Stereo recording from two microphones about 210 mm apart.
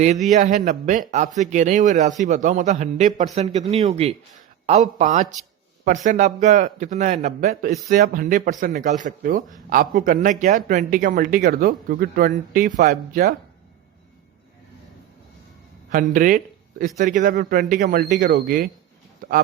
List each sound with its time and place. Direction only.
0.0 s a man's voice: 35° right (ahead or behind)
15.9 s a man's voice: 40° right (ahead or behind)
19.2 s a sound: 40° right (ahead or behind)